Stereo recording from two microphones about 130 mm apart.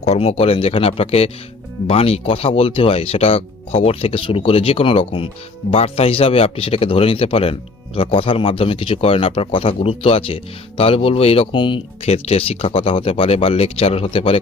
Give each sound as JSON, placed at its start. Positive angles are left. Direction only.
{"t": 0.0, "sound": "speech", "side_deg": 50}